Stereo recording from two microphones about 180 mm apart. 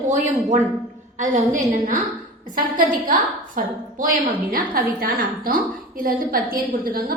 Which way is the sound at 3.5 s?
50° right (ahead or behind).